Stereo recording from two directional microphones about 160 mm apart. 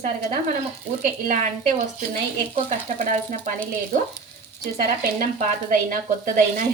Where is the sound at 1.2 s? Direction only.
55° right (ahead or behind).